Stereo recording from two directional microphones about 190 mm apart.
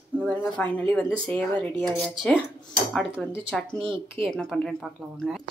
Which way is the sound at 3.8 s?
25° right (ahead or behind).